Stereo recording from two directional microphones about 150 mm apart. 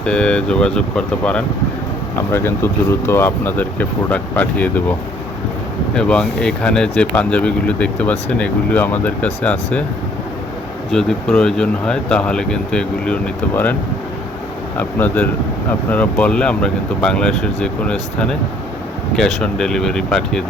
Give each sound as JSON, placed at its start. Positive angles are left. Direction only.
{"t": 0.0, "sound": "speech", "side_deg": 5}
{"t": 5.9, "sound": "speech", "side_deg": 5}
{"t": 10.9, "sound": "speech", "side_deg": 5}
{"t": 14.8, "sound": "speech", "side_deg": 10}
{"t": 19.1, "sound": "speech", "side_deg": 5}